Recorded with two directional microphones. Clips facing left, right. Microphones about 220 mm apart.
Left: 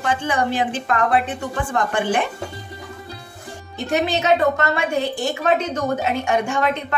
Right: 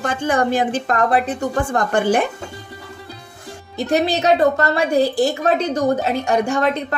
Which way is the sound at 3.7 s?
35° right (ahead or behind).